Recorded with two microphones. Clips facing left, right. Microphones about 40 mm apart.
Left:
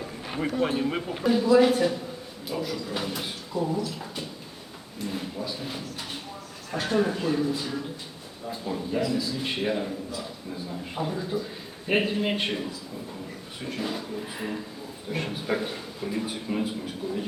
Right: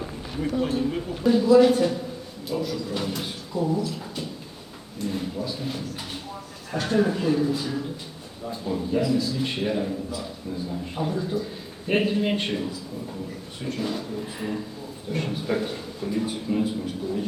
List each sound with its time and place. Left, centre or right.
0.3 s a sound: left
0.7 s speech: left
1.2 s a man's voice: centre
13.7 s a man's voice: centre